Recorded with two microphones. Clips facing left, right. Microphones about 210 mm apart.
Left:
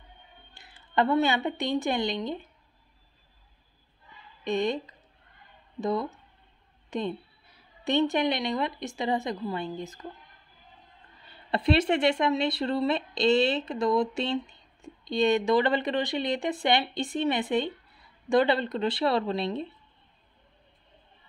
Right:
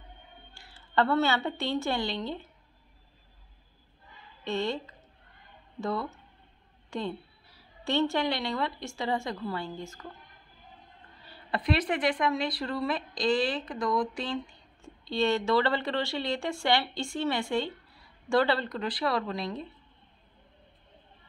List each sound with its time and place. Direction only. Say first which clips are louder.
0.6 s a woman's voice: left 1 dB; 15° left (ahead or behind)
4.5 s a woman's voice: left 3 dB; 15° left (ahead or behind)
11.5 s speech: left 5 dB; 25° left (ahead or behind)